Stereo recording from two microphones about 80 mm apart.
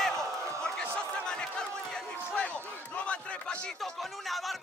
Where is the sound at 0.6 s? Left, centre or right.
Centre.